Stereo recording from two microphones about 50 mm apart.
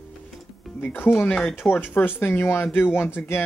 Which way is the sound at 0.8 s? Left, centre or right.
Left.